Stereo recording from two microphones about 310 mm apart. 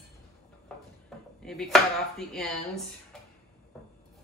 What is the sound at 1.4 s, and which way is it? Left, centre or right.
Speech, centre.